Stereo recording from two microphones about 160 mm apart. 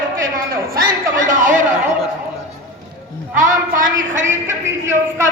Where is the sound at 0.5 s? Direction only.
60° right (ahead or behind).